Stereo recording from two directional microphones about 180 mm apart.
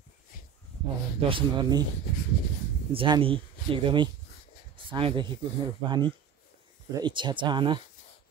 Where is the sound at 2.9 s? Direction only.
30° right (ahead or behind).